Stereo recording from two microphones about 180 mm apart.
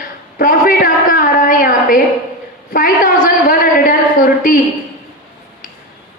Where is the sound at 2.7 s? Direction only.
50° left (ahead or behind).